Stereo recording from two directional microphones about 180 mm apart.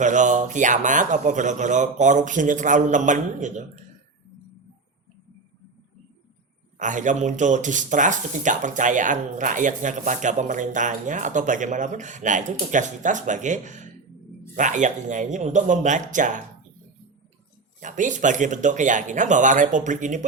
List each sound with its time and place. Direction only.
0.0 s speech: 45° right (ahead or behind)
6.7 s speech: 45° right (ahead or behind)
17.7 s speech: 45° right (ahead or behind)